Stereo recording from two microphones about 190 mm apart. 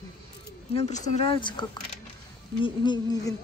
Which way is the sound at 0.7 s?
35° left (ahead or behind).